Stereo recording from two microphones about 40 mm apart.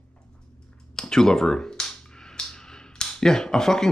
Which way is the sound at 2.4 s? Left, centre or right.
Left.